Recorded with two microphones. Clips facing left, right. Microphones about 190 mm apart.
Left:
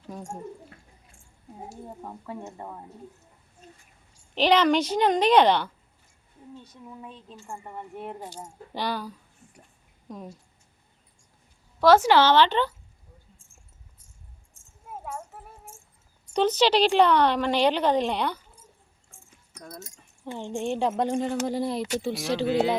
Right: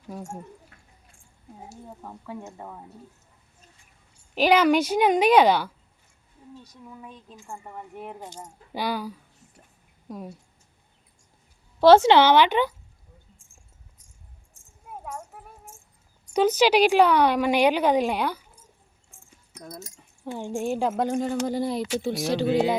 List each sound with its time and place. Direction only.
0.1 s a woman's voice: 10° right (ahead or behind)
2.2 s a woman's voice: centre (ahead or behind)
4.4 s a woman's voice: 5° right (ahead or behind)
6.8 s a woman's voice: 5° left (ahead or behind)
7.1 s a woman's voice: 10° right (ahead or behind)
7.4 s a woman's voice: centre (ahead or behind)
11.8 s a woman's voice: 25° right (ahead or behind)
12.2 s a woman's voice: 15° right (ahead or behind)
15.0 s music: 5° left (ahead or behind)
16.2 s a woman's voice: 10° right (ahead or behind)
19.5 s speech: 15° right (ahead or behind)
20.2 s a woman's voice: centre (ahead or behind)